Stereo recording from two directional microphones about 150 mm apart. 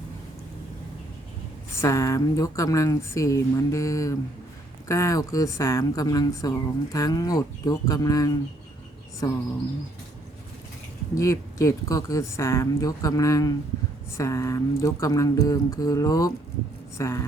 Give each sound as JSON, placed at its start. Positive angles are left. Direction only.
{"t": 1.8, "sound": "speech", "side_deg": 20}
{"t": 11.1, "sound": "speech", "side_deg": 20}